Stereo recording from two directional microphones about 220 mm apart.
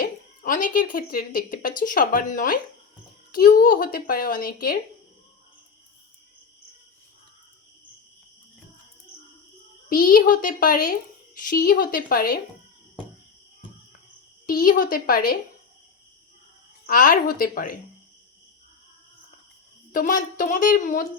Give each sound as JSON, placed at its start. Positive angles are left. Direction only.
{"t": 0.0, "sound": "speech", "side_deg": 40}
{"t": 9.9, "sound": "speech", "side_deg": 40}
{"t": 14.4, "sound": "speech", "side_deg": 40}
{"t": 16.8, "sound": "speech", "side_deg": 40}
{"t": 19.9, "sound": "speech", "side_deg": 40}